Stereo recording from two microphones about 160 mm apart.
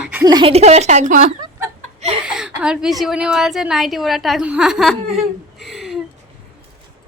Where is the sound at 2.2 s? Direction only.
5° right (ahead or behind).